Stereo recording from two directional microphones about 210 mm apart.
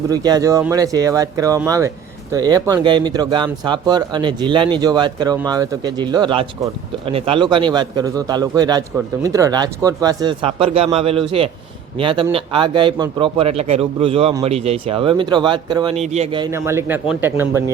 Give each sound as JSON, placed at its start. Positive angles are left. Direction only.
{"t": 0.1, "sound": "speech", "side_deg": -20}
{"t": 16.5, "sound": "speech", "side_deg": -15}